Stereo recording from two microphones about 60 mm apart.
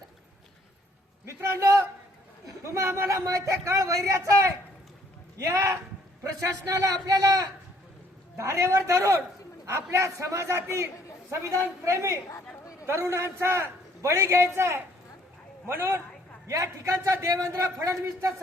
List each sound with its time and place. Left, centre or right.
1.2 s a sound: right
2.5 s speech: right
6.7 s speech: right
8.4 s a man's voice: right
16.5 s speech: right